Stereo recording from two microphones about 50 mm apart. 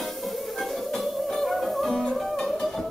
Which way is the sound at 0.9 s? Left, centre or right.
Centre.